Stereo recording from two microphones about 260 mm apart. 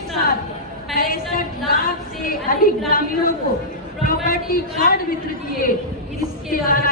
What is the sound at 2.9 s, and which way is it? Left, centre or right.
A man's voice, left.